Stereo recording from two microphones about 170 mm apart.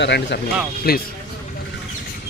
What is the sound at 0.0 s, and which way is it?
Speech, 90° left.